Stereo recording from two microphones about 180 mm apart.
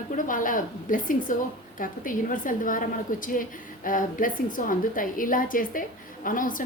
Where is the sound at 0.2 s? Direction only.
50° left (ahead or behind).